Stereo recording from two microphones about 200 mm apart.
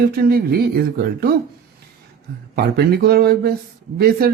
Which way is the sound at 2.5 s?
50° right (ahead or behind).